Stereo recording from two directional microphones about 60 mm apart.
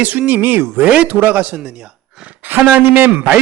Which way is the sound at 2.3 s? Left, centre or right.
Right.